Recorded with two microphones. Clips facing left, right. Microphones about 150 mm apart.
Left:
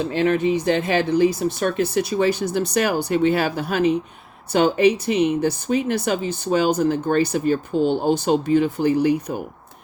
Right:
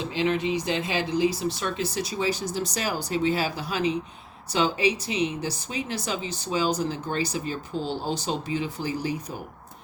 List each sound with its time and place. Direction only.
0.0 s speech: 55° left (ahead or behind)